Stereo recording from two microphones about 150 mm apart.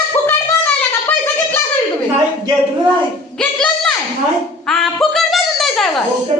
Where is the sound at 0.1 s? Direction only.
15° left (ahead or behind).